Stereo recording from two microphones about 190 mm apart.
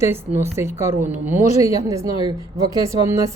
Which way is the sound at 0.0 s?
15° right (ahead or behind).